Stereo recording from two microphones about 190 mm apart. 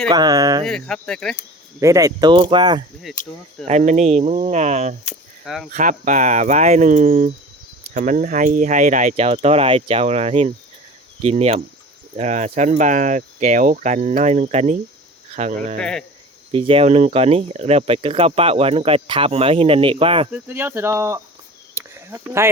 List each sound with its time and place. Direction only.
0.1 s speech: 20° right (ahead or behind)
0.6 s speech: 5° left (ahead or behind)
1.8 s speech: 15° right (ahead or behind)
3.1 s speech: centre (ahead or behind)
3.7 s speech: 40° right (ahead or behind)
15.8 s speech: 5° left (ahead or behind)
16.5 s speech: 30° right (ahead or behind)
20.3 s speech: 10° right (ahead or behind)
21.8 s cricket: 15° right (ahead or behind)